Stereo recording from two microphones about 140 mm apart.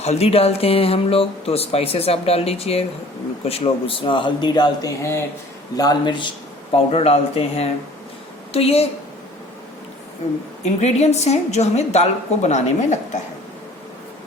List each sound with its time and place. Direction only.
0.0 s a man's voice: 50° left (ahead or behind)
6.7 s speech: 45° left (ahead or behind)
10.2 s speech: 50° left (ahead or behind)